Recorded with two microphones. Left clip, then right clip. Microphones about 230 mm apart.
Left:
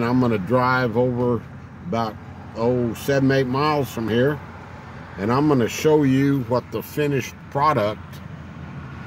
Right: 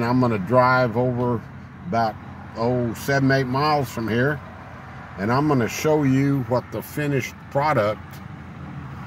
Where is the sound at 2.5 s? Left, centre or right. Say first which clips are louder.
Left 2 dB; centre.